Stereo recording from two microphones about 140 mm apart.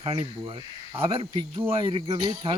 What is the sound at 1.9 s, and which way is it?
Speech, 40° right (ahead or behind).